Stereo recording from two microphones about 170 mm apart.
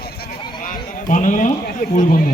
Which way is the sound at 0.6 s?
50° left (ahead or behind).